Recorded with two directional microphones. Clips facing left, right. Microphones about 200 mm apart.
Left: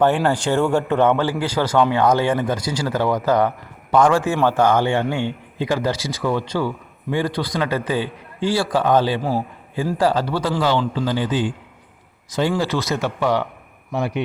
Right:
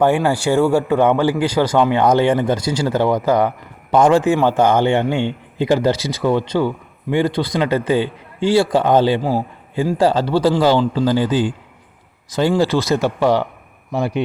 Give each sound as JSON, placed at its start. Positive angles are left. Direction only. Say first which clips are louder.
{"t": 0.0, "sound": "speech", "louder": "right 2 dB", "side_deg": -10}
{"t": 3.2, "sound": "a man's voice", "louder": "right 2 dB", "side_deg": -15}